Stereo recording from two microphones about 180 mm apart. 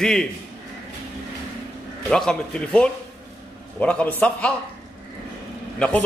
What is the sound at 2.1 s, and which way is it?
A man's voice, 5° left (ahead or behind).